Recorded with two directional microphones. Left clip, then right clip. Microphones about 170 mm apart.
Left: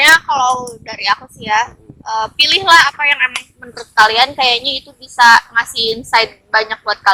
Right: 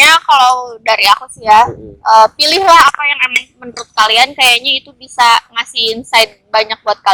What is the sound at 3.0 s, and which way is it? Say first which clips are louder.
A woman's voice: right 1 dB; 15° right (ahead or behind).